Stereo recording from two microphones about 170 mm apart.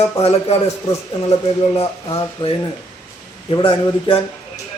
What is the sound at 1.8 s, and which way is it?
Speech, 35° left (ahead or behind).